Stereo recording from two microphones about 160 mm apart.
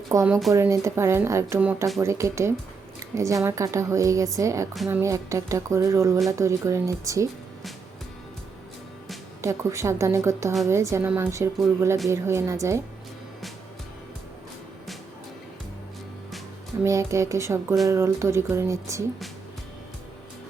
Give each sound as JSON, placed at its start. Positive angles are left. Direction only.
{"t": 0.1, "sound": "a woman's voice", "side_deg": -20}
{"t": 9.4, "sound": "a woman's voice", "side_deg": -20}
{"t": 16.8, "sound": "a woman's voice", "side_deg": -20}